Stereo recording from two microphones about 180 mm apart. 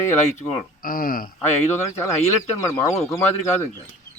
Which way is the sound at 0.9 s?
50° left (ahead or behind).